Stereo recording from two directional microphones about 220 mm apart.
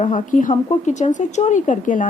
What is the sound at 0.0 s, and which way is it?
Speech, 35° left (ahead or behind).